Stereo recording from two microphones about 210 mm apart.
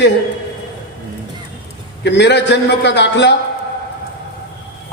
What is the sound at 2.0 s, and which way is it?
A man's voice, 55° left (ahead or behind).